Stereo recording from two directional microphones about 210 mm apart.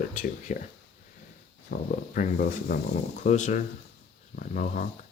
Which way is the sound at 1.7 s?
40° left (ahead or behind).